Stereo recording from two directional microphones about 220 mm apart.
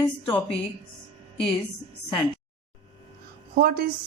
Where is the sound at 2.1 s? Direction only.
20° left (ahead or behind).